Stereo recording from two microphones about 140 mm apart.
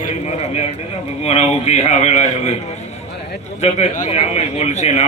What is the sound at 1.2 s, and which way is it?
A man's voice, 50° left (ahead or behind).